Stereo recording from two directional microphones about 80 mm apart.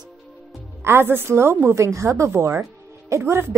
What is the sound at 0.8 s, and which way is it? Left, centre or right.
A woman's voice, right.